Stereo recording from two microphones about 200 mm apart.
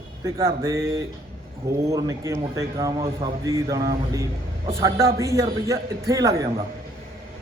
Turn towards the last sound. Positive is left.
turn(degrees=-15)  # may be behind; listen again after turning